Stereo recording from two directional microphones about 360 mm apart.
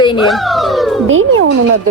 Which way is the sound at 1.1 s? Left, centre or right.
Right.